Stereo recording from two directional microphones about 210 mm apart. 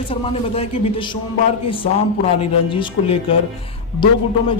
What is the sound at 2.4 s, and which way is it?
A man's voice, 25° left (ahead or behind).